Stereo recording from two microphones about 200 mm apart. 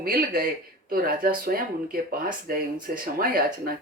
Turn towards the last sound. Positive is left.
turn(degrees=-45)  # may be behind; listen again after turning